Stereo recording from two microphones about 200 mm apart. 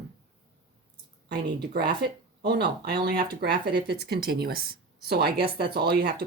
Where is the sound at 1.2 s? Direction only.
50° right (ahead or behind).